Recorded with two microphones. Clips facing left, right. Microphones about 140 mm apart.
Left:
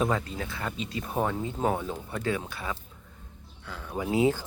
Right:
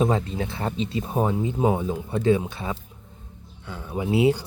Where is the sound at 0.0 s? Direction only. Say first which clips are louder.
Right 5 dB; 25° right (ahead or behind).